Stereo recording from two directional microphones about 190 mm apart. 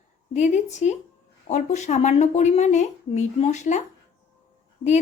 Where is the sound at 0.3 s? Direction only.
40° left (ahead or behind).